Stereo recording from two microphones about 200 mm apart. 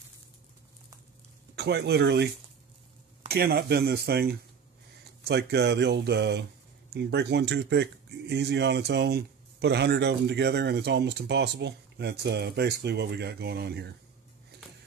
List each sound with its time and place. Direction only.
1.5 s speech: 55° right (ahead or behind)
3.3 s speech: 50° right (ahead or behind)